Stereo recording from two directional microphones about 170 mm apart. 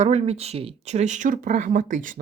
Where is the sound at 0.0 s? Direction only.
40° right (ahead or behind).